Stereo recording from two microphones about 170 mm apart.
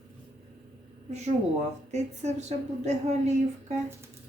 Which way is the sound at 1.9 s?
40° right (ahead or behind).